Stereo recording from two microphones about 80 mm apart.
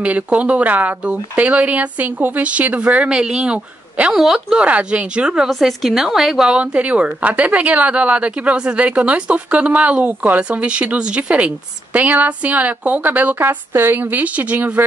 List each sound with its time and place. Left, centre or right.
0.0 s speech: centre
4.1 s a woman's voice: centre
4.6 s a woman's voice: centre
6.6 s speech: centre